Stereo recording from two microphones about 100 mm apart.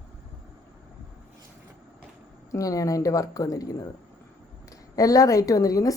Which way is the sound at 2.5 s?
35° left (ahead or behind).